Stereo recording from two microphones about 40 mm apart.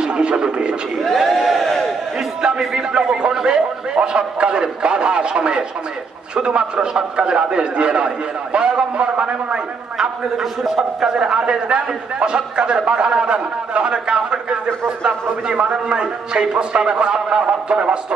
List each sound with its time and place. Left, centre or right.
0.0 s speech: right
1.1 s crowd: centre
2.7 s a man's voice: centre
10.6 s a man's voice: centre
11.3 s a man's voice: right